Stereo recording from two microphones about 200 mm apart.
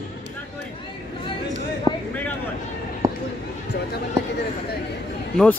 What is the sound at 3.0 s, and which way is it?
Basketball bounce, 15° right (ahead or behind).